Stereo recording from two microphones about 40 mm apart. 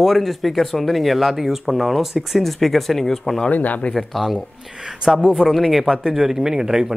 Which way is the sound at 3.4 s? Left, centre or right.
Left.